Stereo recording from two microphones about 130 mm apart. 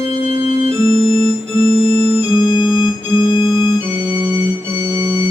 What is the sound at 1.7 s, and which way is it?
Organ, 50° right (ahead or behind).